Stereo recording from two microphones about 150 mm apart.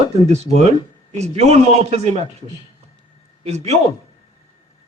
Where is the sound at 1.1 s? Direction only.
45° right (ahead or behind).